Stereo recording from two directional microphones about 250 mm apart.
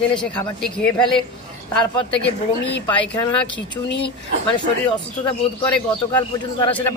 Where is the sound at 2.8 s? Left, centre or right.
Centre.